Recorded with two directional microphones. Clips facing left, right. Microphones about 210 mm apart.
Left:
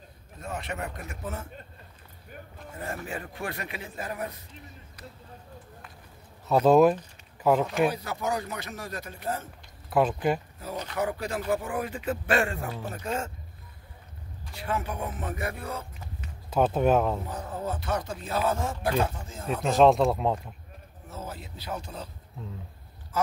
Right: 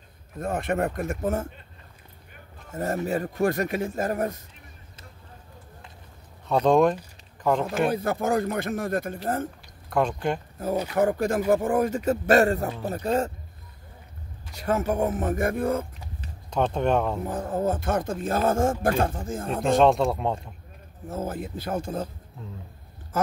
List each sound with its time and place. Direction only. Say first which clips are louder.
0.4 s speech: right 9 dB; 50° right (ahead or behind)
2.7 s speech: right 9 dB; 40° right (ahead or behind)
6.4 s speech: left 1 dB; 5° left (ahead or behind)
7.9 s speech: right 7 dB; 50° right (ahead or behind)
9.8 s speech: left 1 dB; 5° left (ahead or behind)
11.0 s speech: right 7 dB; 50° right (ahead or behind)
14.5 s speech: right 7 dB; 45° right (ahead or behind)
16.4 s speech: left 1 dB; 5° left (ahead or behind)
17.3 s speech: right 7 dB; 50° right (ahead or behind)
19.6 s speech: even; centre (ahead or behind)
21.1 s speech: right 9 dB; 50° right (ahead or behind)
23.1 s a sound: right 2 dB; 50° right (ahead or behind)